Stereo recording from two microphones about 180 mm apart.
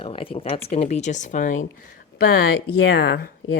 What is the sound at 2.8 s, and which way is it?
Speech, 60° left (ahead or behind).